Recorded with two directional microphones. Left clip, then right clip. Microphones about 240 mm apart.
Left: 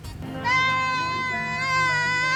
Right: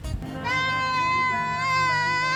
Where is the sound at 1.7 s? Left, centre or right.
Centre.